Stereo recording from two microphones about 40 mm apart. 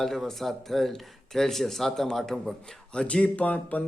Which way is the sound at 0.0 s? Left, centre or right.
Centre.